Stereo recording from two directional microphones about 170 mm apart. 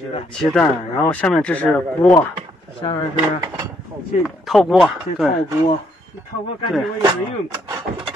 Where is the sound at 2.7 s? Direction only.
30° left (ahead or behind).